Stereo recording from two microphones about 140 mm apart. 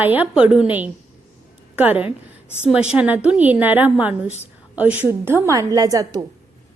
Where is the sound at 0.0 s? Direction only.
10° right (ahead or behind).